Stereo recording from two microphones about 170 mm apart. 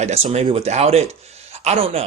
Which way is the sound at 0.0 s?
40° right (ahead or behind).